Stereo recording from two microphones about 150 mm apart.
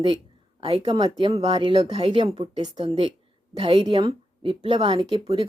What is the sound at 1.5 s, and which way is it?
Speech, 30° right (ahead or behind).